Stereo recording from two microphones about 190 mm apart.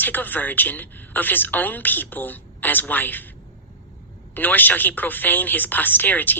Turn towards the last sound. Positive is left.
turn(degrees=10)  # may be behind; listen again after turning